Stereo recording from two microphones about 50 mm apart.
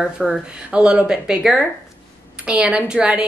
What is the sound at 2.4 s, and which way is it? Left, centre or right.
Speech, centre.